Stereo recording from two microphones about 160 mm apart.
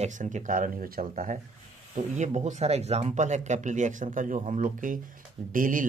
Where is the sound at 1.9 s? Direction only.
45° right (ahead or behind).